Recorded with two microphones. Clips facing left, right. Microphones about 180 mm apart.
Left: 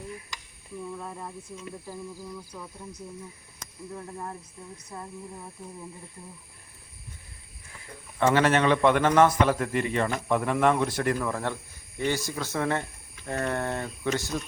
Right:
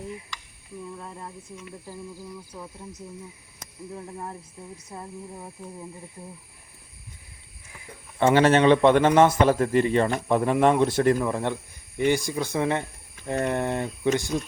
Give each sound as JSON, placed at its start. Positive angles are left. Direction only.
{"t": 8.2, "sound": "a man's voice", "side_deg": -30}